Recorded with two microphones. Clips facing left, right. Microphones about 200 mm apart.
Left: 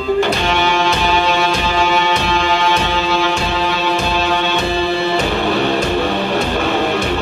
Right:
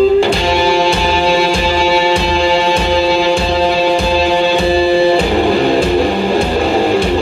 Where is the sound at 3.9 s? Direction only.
15° right (ahead or behind).